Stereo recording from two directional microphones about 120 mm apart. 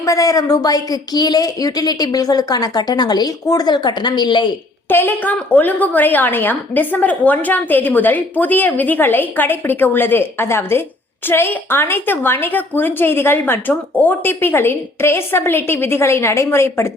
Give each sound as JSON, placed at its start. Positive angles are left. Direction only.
{"t": 0.0, "sound": "a woman's voice", "side_deg": 30}
{"t": 4.9, "sound": "a woman's voice", "side_deg": 15}